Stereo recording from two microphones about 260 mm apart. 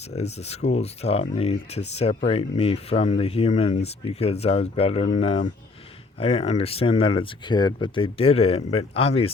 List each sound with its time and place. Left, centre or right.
0.1 s speech: left